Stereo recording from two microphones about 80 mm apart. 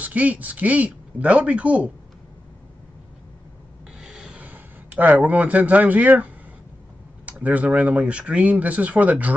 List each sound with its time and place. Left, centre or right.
0.0 s speech: centre
4.0 s rub: centre
4.5 s speech: right